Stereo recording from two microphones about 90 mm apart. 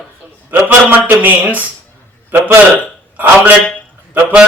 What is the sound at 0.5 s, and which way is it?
A man's voice, 20° right (ahead or behind).